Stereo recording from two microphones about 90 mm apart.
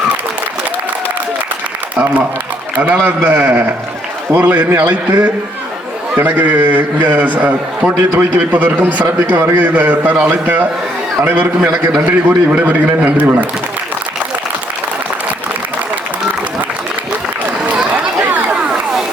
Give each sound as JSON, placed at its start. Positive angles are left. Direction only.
{"t": 2.7, "sound": "a man's voice", "side_deg": -15}
{"t": 6.1, "sound": "a man's voice", "side_deg": -15}
{"t": 17.7, "sound": "a sound", "side_deg": -15}